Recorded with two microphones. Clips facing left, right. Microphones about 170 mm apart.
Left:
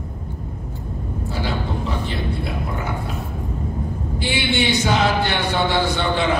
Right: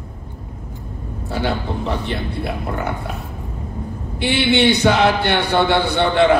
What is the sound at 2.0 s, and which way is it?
Speech, 60° right (ahead or behind).